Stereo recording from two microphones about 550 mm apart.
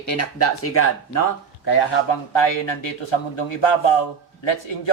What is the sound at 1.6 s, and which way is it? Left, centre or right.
Speech, left.